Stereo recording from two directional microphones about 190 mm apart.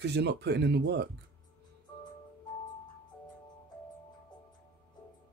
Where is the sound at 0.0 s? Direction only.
60° right (ahead or behind).